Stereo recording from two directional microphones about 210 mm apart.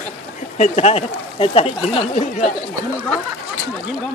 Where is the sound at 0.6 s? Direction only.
30° left (ahead or behind).